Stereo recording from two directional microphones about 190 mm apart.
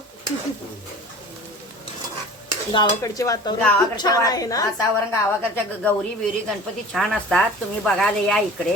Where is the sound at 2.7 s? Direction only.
15° left (ahead or behind).